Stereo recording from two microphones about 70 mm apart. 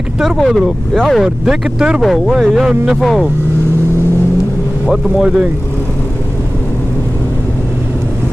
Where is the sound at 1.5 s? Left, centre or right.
Centre.